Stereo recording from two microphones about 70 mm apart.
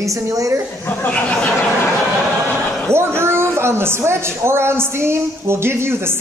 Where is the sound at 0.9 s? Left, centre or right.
Centre.